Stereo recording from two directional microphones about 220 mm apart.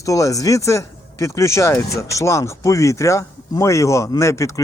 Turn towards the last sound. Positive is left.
turn(degrees=15)  # may be behind; listen again after turning